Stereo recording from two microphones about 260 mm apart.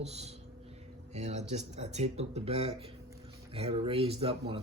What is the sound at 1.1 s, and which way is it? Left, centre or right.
A man's voice, right.